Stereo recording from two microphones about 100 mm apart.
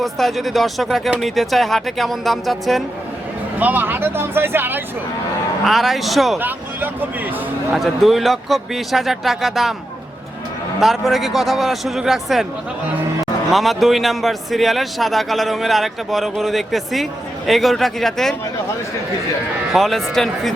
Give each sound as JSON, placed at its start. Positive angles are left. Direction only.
{"t": 0.0, "sound": "a man's voice", "side_deg": 0}
{"t": 3.6, "sound": "speech", "side_deg": -20}
{"t": 5.6, "sound": "a man's voice", "side_deg": 0}
{"t": 6.4, "sound": "speech", "side_deg": -20}
{"t": 7.7, "sound": "a man's voice", "side_deg": 0}
{"t": 10.8, "sound": "a man's voice", "side_deg": 0}
{"t": 13.5, "sound": "a man's voice", "side_deg": 0}
{"t": 19.7, "sound": "a man's voice", "side_deg": 0}